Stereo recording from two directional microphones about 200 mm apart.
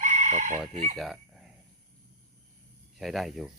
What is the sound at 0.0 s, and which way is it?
Chicken, 40° right (ahead or behind).